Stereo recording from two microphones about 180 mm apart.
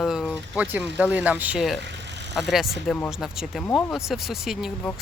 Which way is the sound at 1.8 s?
75° right (ahead or behind).